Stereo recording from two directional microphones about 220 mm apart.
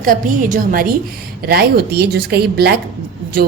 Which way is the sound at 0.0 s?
40° right (ahead or behind).